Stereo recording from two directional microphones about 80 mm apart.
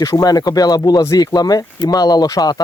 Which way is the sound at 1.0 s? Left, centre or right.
Left.